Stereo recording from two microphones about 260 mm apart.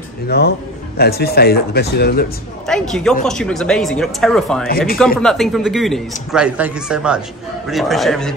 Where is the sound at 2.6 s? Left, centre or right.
Centre.